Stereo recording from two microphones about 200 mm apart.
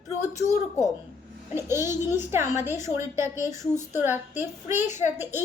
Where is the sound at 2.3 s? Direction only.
10° right (ahead or behind).